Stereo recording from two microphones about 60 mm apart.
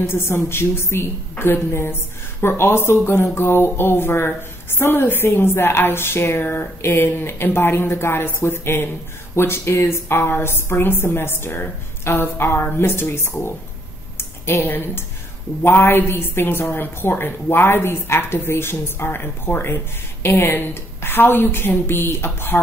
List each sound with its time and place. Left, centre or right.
0.0 s a woman's voice: left